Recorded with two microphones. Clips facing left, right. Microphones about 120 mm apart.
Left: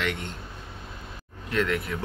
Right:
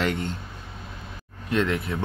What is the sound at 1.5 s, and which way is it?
Speech, 25° right (ahead or behind).